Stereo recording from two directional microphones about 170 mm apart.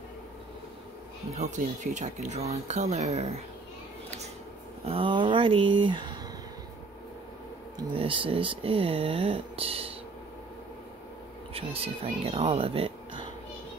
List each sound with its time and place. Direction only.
1.3 s speech: 45° right (ahead or behind)
4.8 s speech: 30° right (ahead or behind)
7.7 s speech: 30° right (ahead or behind)
11.5 s speech: 35° right (ahead or behind)